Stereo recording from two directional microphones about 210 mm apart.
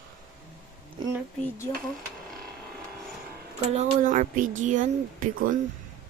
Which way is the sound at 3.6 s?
30° right (ahead or behind).